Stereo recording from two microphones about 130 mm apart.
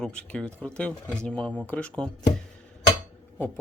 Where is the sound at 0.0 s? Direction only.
5° left (ahead or behind).